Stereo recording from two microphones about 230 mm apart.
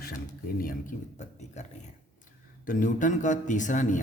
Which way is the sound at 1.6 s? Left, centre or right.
Left.